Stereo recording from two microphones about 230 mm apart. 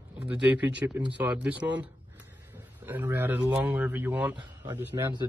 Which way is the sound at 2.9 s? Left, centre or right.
Centre.